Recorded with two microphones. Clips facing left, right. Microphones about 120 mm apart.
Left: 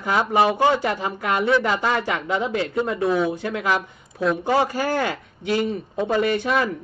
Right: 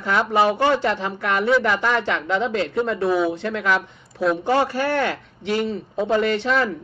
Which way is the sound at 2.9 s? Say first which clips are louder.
Even; centre (ahead or behind).